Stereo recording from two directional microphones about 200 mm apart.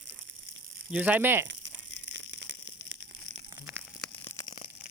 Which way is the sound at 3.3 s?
40° right (ahead or behind).